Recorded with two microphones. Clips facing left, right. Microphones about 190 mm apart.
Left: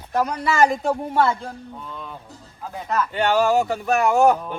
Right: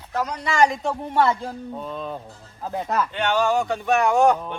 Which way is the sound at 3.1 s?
10° left (ahead or behind).